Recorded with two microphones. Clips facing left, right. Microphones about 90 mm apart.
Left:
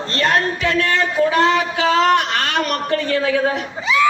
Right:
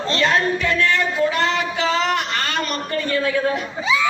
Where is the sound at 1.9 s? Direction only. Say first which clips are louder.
Left 9 dB; 70° left (ahead or behind); by 3.6 s 90° left.